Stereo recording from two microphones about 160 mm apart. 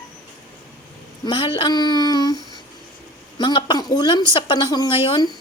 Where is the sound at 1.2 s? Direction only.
35° left (ahead or behind).